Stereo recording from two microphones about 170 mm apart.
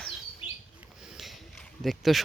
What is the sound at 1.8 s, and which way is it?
Speech, centre (ahead or behind).